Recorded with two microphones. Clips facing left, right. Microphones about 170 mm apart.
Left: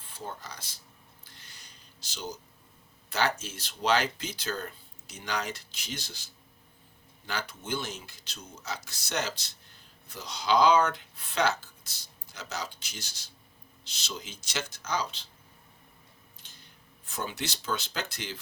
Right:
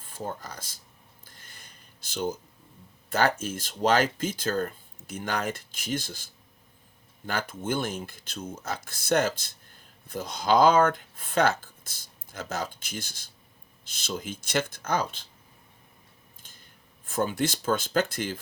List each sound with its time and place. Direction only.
0.0 s speech: 45° right (ahead or behind)
1.2 s a sound: 50° right (ahead or behind)
3.1 s speech: 50° right (ahead or behind)
16.4 s scissors: 50° right (ahead or behind)
17.1 s speech: 50° right (ahead or behind)